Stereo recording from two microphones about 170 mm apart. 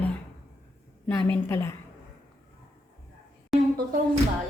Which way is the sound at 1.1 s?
15° left (ahead or behind).